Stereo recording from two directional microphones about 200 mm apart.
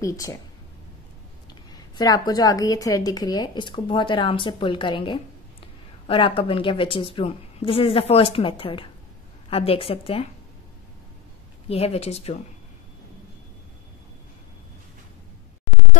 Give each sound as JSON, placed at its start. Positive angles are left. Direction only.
{"t": 0.0, "sound": "speech", "side_deg": 15}
{"t": 1.5, "sound": "a woman's voice", "side_deg": 20}
{"t": 11.7, "sound": "speech", "side_deg": 30}